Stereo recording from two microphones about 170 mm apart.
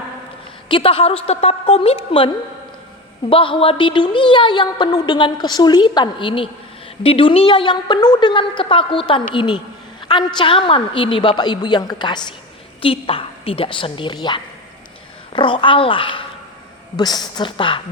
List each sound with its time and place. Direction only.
0.7 s a woman's voice: 30° left (ahead or behind)